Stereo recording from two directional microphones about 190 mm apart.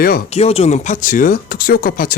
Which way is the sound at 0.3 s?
35° left (ahead or behind).